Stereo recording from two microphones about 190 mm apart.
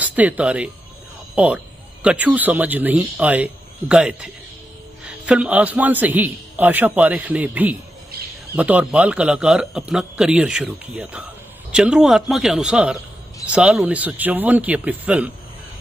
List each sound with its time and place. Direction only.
0.0 s a man's voice: 10° right (ahead or behind)
8.1 s bird: 55° right (ahead or behind)
8.5 s a man's voice: 5° right (ahead or behind)